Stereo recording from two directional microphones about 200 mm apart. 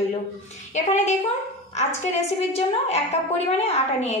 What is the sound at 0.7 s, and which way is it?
Speech, 35° left (ahead or behind).